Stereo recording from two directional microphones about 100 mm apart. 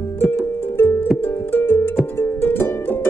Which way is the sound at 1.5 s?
20° left (ahead or behind).